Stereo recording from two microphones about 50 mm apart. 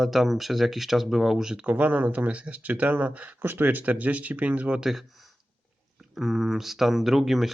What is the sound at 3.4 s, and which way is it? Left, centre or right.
Speech, right.